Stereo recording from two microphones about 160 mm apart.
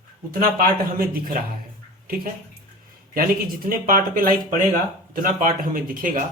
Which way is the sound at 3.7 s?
60° right (ahead or behind).